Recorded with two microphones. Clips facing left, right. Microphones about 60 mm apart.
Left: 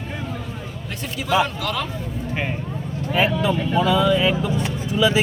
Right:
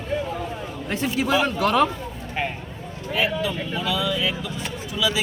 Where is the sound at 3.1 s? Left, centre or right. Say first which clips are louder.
Left 4 dB; left.